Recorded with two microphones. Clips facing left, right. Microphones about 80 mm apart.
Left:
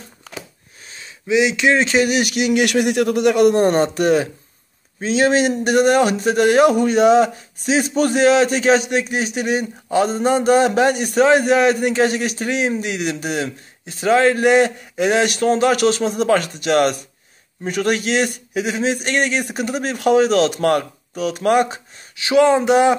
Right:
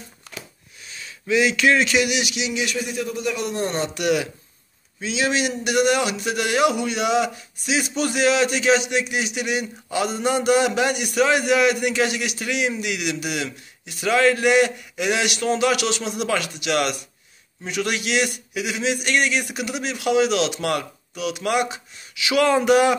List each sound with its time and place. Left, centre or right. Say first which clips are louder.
1.2 s speech: left 2 dB; centre